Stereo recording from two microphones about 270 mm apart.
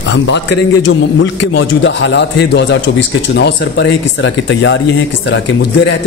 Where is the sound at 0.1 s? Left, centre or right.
Left.